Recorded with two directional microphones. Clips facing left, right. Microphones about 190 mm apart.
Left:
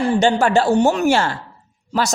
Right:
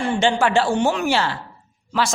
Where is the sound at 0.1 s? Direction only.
40° left (ahead or behind).